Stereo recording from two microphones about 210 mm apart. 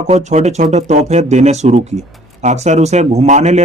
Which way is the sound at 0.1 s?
35° right (ahead or behind).